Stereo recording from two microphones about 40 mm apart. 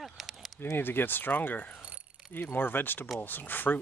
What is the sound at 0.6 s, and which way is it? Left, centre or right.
Speech, left.